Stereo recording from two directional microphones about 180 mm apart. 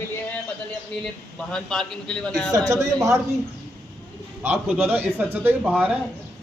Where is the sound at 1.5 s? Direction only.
5° left (ahead or behind).